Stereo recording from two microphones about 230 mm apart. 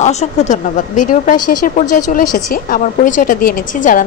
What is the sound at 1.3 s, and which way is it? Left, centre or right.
Speech, left.